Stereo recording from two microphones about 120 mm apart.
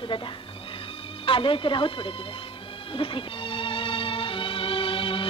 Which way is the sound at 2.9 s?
50° left (ahead or behind).